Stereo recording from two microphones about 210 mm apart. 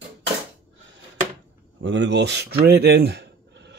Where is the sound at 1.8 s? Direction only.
55° right (ahead or behind).